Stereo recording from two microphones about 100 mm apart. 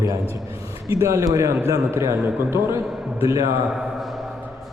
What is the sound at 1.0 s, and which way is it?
A man's voice, 30° right (ahead or behind).